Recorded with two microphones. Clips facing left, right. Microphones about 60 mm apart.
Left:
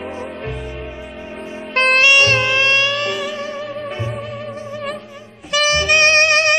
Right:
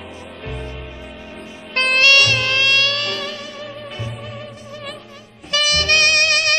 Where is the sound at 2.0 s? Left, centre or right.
Centre.